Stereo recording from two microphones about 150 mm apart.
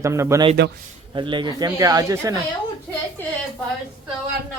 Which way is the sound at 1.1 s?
30° right (ahead or behind).